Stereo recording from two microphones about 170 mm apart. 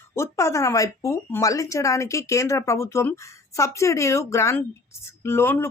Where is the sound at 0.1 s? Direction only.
15° left (ahead or behind).